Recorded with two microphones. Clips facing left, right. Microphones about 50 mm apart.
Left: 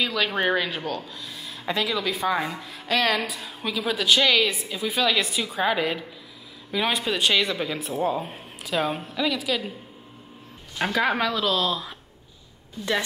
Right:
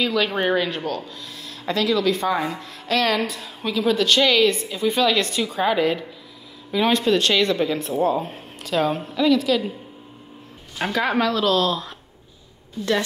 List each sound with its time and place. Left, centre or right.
0.0 s speech: centre
10.8 s speech: centre